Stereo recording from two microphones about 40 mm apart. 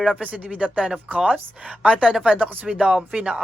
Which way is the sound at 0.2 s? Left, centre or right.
Right.